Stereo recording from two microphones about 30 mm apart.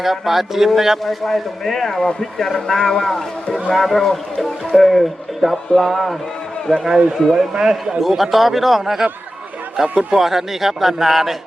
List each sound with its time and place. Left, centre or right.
0.0 s a man's voice: centre
1.0 s speech: centre
6.8 s a man's voice: right
8.0 s a man's voice: centre
9.7 s speech: right
10.2 s a man's voice: centre